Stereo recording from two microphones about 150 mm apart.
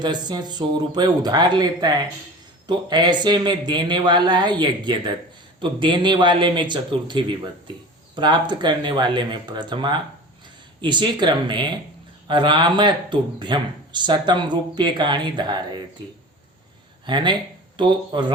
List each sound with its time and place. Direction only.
0.0 s speech: 30° right (ahead or behind)
17.1 s speech: 30° right (ahead or behind)